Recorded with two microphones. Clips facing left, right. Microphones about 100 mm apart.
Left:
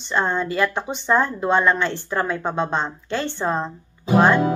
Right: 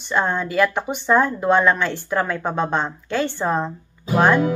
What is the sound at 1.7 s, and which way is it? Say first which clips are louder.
Speech: right 1 dB; 5° right (ahead or behind).